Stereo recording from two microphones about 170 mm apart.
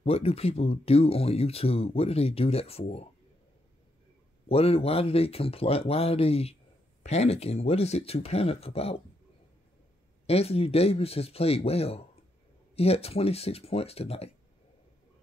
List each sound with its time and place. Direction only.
0.0 s speech: 35° left (ahead or behind)
4.5 s speech: 35° left (ahead or behind)
10.2 s speech: 35° left (ahead or behind)